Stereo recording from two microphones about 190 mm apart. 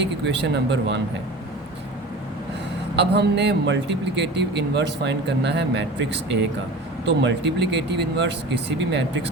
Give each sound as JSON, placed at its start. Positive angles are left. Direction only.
{"t": 0.3, "sound": "speech", "side_deg": -65}
{"t": 2.9, "sound": "speech", "side_deg": -65}